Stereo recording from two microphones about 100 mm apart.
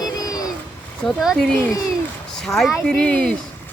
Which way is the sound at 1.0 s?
Centre (ahead or behind).